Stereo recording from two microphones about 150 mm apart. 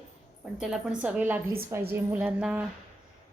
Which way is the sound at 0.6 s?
5° right (ahead or behind).